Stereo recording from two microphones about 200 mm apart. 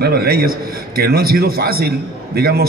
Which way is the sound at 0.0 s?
50° right (ahead or behind).